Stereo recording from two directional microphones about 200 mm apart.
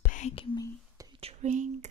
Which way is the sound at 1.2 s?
35° right (ahead or behind).